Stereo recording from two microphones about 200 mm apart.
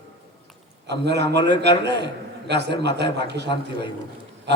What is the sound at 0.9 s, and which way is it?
Speech, 55° right (ahead or behind).